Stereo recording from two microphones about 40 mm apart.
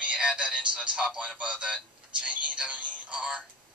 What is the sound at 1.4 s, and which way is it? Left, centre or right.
Telephone, right.